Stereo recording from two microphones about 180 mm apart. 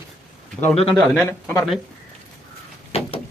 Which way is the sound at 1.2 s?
15° left (ahead or behind).